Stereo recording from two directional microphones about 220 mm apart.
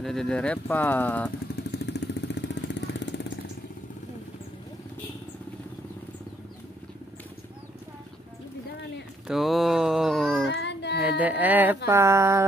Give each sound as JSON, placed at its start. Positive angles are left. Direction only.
{"t": 0.0, "sound": "speech", "side_deg": 0}
{"t": 1.7, "sound": "vehicle", "side_deg": 50}
{"t": 9.3, "sound": "cat", "side_deg": 0}
{"t": 10.5, "sound": "child singing", "side_deg": 50}
{"t": 11.1, "sound": "a sound", "side_deg": -5}